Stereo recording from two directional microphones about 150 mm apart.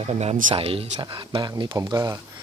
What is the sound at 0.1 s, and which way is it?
Speech, 45° right (ahead or behind).